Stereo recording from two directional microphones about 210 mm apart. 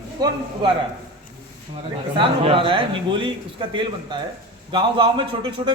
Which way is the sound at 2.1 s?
25° right (ahead or behind).